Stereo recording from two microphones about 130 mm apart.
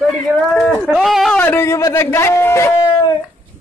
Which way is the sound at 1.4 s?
15° left (ahead or behind).